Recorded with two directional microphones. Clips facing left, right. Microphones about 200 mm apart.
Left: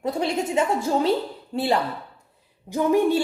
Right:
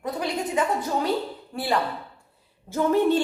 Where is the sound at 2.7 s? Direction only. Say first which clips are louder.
Left 1 dB; 15° left (ahead or behind).